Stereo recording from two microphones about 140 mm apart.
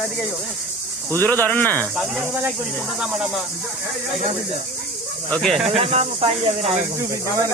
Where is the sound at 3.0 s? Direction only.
5° right (ahead or behind).